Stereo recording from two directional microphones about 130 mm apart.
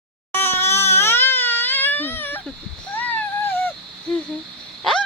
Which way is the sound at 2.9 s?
15° left (ahead or behind).